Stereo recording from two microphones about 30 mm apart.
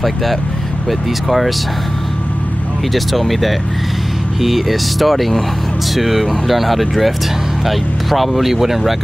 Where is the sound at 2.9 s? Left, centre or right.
Centre.